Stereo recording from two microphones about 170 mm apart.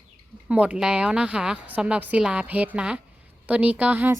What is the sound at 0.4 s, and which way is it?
Speech, 5° right (ahead or behind).